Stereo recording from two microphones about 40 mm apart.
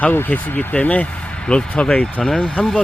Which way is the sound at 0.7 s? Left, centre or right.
Left.